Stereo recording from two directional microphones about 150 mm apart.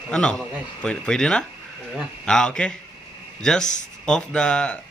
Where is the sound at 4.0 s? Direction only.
5° left (ahead or behind).